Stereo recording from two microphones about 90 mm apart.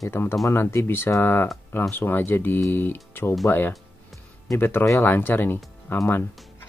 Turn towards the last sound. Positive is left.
turn(degrees=25)  # may be behind; listen again after turning